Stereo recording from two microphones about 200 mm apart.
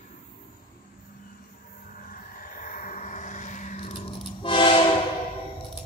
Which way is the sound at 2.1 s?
45° left (ahead or behind).